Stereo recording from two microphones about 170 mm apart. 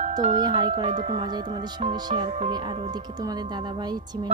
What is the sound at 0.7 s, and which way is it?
Speech, 40° right (ahead or behind).